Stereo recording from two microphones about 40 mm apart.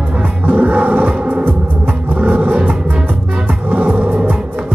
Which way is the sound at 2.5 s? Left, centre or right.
Right.